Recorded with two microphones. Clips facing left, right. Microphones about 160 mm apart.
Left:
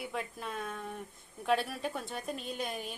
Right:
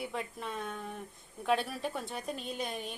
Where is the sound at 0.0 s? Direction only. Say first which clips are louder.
Right 1 dB; centre (ahead or behind).